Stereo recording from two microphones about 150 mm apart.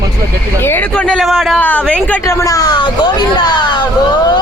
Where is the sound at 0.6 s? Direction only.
15° left (ahead or behind).